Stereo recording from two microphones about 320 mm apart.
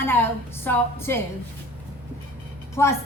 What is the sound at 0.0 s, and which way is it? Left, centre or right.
A woman's voice, centre.